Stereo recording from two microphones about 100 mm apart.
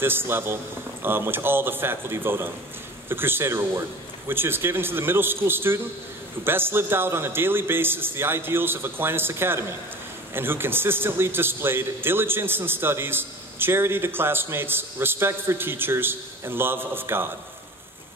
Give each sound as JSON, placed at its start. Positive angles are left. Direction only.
{"t": 0.0, "sound": "a man's voice", "side_deg": -20}